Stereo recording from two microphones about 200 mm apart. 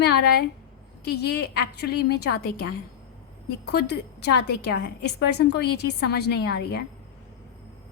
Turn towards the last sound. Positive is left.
turn(degrees=55)  # may be behind; listen again after turning